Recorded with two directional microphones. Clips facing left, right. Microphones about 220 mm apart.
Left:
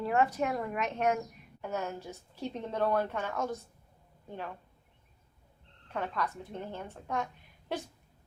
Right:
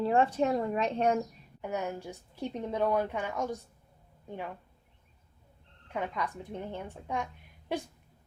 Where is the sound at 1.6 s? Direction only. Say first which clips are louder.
Right 2 dB; 15° right (ahead or behind).